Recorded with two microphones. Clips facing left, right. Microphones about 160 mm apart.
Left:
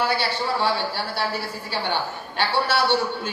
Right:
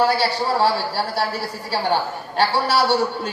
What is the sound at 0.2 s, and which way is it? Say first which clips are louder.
A woman's voice: right 5 dB; 40° right (ahead or behind).